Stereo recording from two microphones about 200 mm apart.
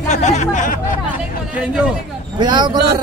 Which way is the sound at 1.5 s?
5° right (ahead or behind).